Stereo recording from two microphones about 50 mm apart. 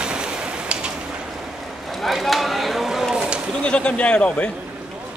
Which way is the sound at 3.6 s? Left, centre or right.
Left.